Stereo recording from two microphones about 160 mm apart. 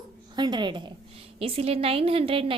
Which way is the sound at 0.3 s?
25° right (ahead or behind).